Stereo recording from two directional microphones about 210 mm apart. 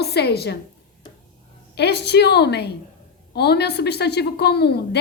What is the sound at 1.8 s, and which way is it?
A woman's voice, 50° left (ahead or behind).